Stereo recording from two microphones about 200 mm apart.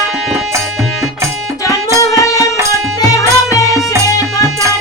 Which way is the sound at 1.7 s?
15° left (ahead or behind).